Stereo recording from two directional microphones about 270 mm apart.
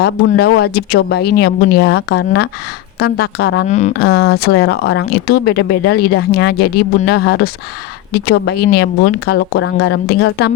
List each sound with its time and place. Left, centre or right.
0.0 s speech: left
3.7 s speech: left